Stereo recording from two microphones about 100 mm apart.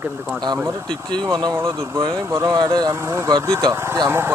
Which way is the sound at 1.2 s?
45° right (ahead or behind).